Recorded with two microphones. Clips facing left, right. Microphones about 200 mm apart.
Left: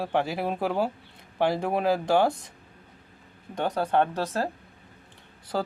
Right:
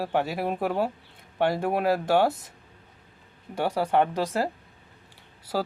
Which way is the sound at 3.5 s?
10° right (ahead or behind).